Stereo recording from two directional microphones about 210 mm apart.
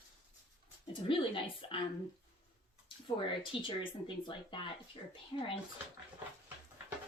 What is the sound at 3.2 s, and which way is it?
A woman's voice, 25° left (ahead or behind).